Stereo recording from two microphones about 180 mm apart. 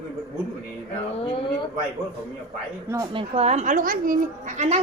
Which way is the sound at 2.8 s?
20° right (ahead or behind).